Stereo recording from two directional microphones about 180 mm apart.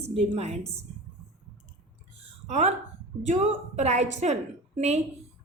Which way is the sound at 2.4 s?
40° right (ahead or behind).